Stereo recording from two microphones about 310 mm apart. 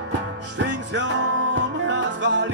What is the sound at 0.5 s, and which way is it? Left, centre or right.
Music, right.